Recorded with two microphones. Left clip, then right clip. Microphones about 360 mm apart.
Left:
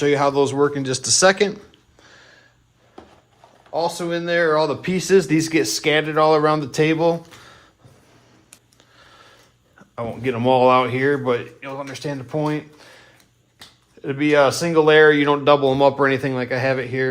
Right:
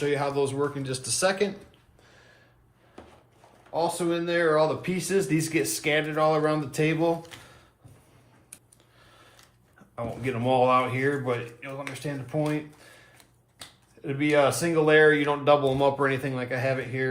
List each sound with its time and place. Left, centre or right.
0.0 s speech: centre
3.7 s speech: left
9.0 s a sound: left
9.9 s speech: left